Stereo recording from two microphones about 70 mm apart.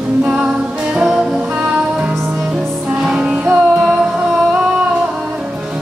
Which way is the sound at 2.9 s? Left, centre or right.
Centre.